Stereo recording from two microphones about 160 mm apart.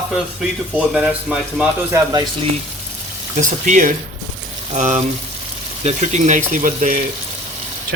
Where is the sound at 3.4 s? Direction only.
50° right (ahead or behind).